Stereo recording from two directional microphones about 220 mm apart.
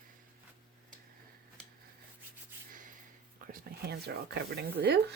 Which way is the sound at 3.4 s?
40° right (ahead or behind).